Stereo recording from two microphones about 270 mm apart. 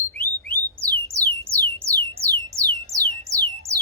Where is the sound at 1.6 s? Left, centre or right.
Right.